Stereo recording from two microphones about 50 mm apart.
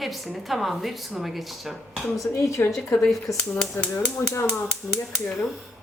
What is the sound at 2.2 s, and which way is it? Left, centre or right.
Speech, left.